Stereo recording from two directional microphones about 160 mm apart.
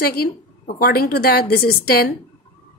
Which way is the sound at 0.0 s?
70° left (ahead or behind).